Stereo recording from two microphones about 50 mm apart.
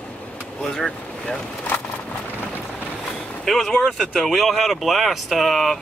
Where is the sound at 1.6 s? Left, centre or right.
Left.